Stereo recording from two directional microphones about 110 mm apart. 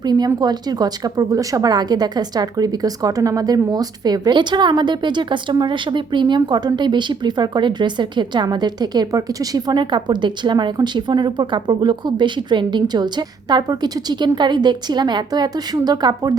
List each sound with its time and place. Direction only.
0.0 s a woman's voice: 40° right (ahead or behind)